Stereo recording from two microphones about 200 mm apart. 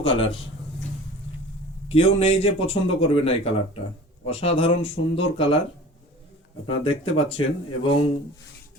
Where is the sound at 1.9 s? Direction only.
30° left (ahead or behind).